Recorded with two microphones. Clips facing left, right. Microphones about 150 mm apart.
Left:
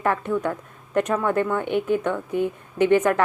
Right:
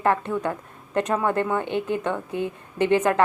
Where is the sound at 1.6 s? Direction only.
10° left (ahead or behind).